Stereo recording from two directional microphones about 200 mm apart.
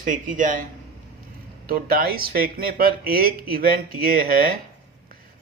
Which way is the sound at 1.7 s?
45° right (ahead or behind).